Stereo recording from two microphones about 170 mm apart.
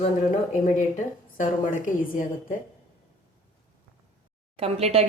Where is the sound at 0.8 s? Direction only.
45° left (ahead or behind).